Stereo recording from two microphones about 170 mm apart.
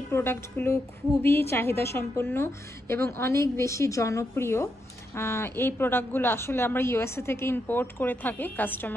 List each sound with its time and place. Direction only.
0.1 s a woman's voice: 15° left (ahead or behind)